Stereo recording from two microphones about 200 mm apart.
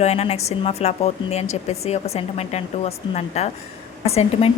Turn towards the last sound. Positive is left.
turn(degrees=30)  # may be behind; listen again after turning